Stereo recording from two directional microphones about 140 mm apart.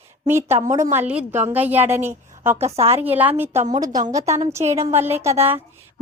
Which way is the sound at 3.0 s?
10° right (ahead or behind).